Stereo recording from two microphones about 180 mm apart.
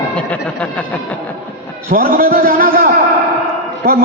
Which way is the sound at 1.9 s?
50° right (ahead or behind).